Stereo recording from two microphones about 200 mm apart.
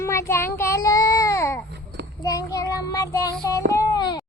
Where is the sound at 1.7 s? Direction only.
60° right (ahead or behind).